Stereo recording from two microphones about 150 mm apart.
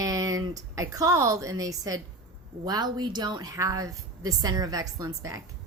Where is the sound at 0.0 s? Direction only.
20° right (ahead or behind).